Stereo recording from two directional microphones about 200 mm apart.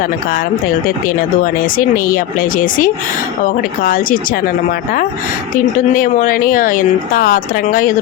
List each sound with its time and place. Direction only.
2.0 s a woman's voice: 45° left (ahead or behind)
5.9 s a woman's voice: 40° left (ahead or behind)